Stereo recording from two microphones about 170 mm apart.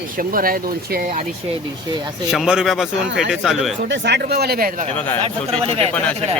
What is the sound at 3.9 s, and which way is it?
Speech, 90° right.